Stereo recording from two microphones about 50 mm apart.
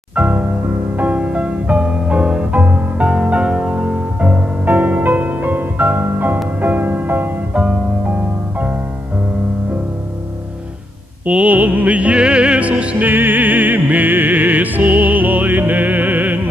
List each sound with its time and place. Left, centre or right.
0.1 s music: right
7.5 s music: right
11.2 s music: right
13.1 s music: right